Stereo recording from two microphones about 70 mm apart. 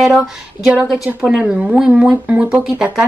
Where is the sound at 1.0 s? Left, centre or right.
Centre.